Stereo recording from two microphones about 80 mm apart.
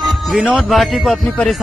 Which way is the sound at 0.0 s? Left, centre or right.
Centre.